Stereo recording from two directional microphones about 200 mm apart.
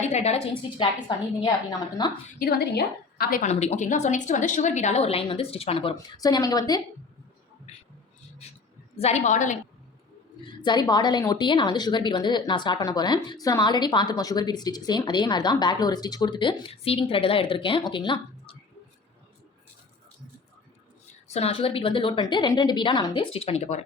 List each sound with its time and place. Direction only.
0.0 s a woman's voice: 35° left (ahead or behind)
2.0 s a woman's voice: 20° left (ahead or behind)
2.4 s a woman's voice: 50° left (ahead or behind)
3.5 s a woman's voice: 35° left (ahead or behind)
9.0 s a woman's voice: 35° left (ahead or behind)
10.4 s a woman's voice: 20° left (ahead or behind)
21.2 s a woman's voice: 30° left (ahead or behind)